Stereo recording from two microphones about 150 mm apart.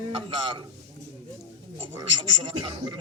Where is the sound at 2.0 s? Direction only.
30° right (ahead or behind).